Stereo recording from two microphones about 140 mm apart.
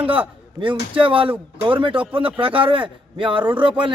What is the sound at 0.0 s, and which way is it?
A man's voice, 40° right (ahead or behind).